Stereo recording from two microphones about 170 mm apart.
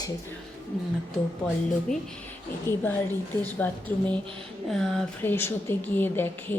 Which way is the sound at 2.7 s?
15° left (ahead or behind).